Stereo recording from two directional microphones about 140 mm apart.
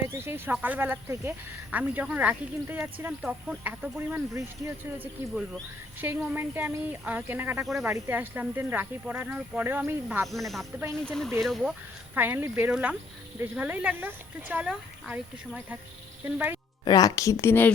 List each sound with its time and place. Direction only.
0.1 s speech: 15° right (ahead or behind)
6.3 s speech: 15° right (ahead or behind)
10.3 s speech: centre (ahead or behind)
12.1 s speech: 15° right (ahead or behind)
16.8 s a woman's voice: 25° left (ahead or behind)